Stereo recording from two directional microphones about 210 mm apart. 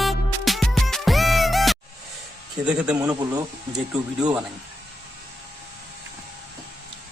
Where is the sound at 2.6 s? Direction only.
5° right (ahead or behind).